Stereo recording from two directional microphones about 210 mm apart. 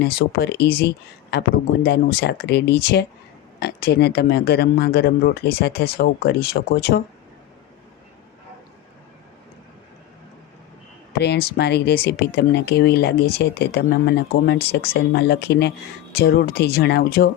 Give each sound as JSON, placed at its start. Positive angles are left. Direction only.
{"t": 0.0, "sound": "speech", "side_deg": 50}
{"t": 11.2, "sound": "speech", "side_deg": 50}